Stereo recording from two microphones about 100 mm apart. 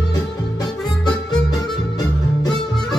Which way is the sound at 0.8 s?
45° left (ahead or behind).